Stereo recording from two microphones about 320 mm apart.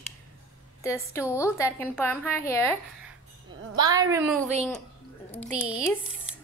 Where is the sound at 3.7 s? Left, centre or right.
Centre.